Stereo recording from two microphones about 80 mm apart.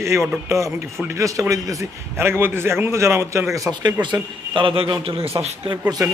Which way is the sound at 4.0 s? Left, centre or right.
Right.